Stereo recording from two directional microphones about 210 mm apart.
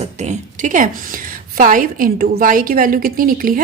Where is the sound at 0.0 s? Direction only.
35° right (ahead or behind).